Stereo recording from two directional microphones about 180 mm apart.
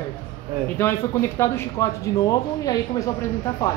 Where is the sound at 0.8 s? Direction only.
10° left (ahead or behind).